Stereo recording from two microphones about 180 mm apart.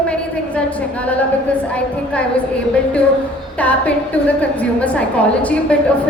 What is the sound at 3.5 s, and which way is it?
A woman's voice, 10° left (ahead or behind).